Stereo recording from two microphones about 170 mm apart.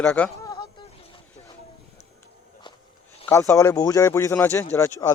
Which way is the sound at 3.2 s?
15° left (ahead or behind).